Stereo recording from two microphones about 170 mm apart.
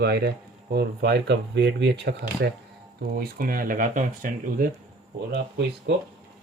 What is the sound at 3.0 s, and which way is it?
Speech, 60° right (ahead or behind).